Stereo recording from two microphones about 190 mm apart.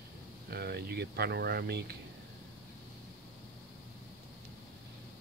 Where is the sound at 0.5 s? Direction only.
55° right (ahead or behind).